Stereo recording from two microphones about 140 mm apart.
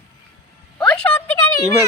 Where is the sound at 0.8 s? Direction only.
5° left (ahead or behind).